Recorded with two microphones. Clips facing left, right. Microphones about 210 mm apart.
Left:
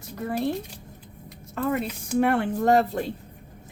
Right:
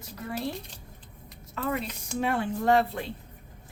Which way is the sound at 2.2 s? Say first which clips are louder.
Left 6 dB; 60° left (ahead or behind).